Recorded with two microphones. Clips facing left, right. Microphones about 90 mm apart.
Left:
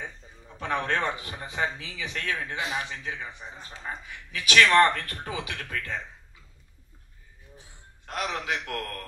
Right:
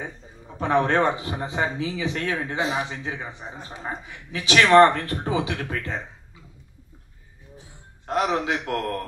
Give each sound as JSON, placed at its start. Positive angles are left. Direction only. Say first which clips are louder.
{"t": 0.6, "sound": "speech", "louder": "right 7 dB", "side_deg": -30}
{"t": 8.1, "sound": "speech", "louder": "right 7 dB", "side_deg": -25}